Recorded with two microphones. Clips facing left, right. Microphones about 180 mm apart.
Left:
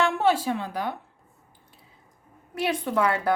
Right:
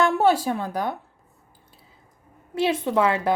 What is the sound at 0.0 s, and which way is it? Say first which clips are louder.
Speech: right 3 dB; 40° right (ahead or behind).